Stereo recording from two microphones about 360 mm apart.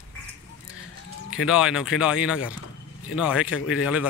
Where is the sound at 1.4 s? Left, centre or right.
Centre.